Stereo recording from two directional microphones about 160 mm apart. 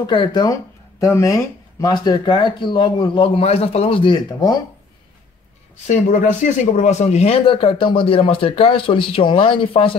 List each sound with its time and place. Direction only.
0.0 s speech: 30° left (ahead or behind)
5.9 s speech: 45° left (ahead or behind)